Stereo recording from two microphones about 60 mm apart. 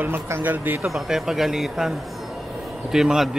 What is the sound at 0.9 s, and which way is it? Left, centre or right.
Speech, centre.